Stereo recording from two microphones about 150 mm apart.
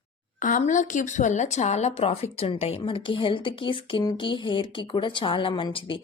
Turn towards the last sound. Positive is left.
turn(degrees=35)  # may be behind; listen again after turning